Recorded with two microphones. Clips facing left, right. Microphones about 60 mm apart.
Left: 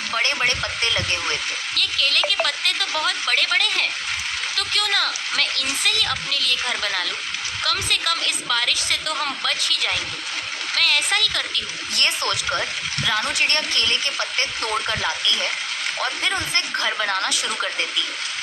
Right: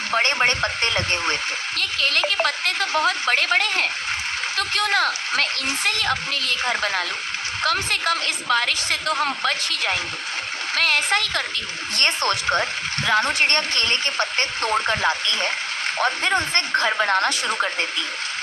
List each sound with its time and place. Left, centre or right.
0.1 s a woman's voice: right